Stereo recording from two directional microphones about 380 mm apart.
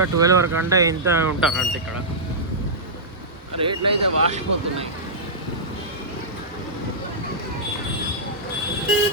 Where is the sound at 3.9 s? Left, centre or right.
Centre.